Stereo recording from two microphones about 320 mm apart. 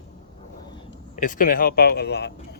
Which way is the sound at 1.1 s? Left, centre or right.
Left.